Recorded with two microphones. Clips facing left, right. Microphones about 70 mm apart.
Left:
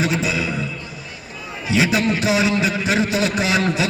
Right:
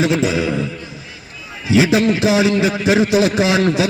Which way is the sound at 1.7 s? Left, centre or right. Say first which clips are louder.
Right 5 dB; right.